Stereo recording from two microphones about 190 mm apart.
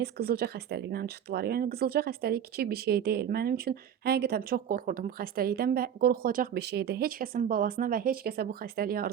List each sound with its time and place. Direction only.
0.0 s speech: 55° right (ahead or behind)